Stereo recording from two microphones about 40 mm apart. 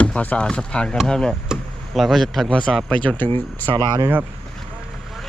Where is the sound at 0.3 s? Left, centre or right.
Left.